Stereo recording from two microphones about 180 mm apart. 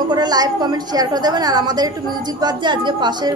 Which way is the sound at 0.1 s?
20° right (ahead or behind).